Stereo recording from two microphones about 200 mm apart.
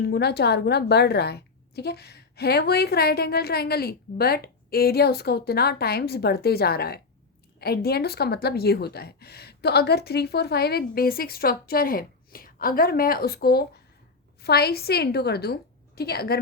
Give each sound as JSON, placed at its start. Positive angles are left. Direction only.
{"t": 0.0, "sound": "a woman's voice", "side_deg": 55}